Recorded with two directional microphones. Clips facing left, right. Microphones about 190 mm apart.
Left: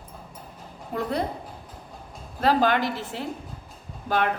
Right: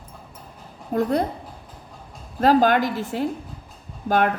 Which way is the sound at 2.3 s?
45° right (ahead or behind).